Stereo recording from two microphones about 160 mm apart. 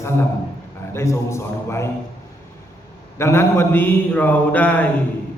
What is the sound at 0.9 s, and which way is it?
Speech, 15° left (ahead or behind).